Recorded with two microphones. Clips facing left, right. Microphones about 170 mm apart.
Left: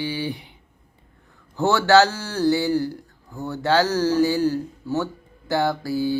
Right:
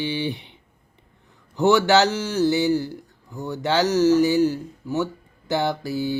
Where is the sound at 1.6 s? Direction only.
15° right (ahead or behind).